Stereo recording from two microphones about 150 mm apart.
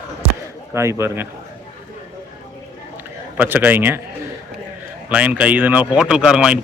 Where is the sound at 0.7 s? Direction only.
20° right (ahead or behind).